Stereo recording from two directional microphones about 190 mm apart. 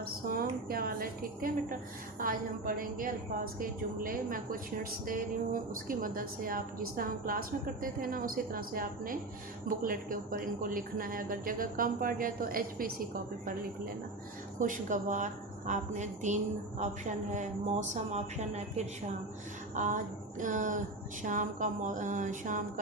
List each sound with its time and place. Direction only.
0.0 s a woman's voice: 50° right (ahead or behind)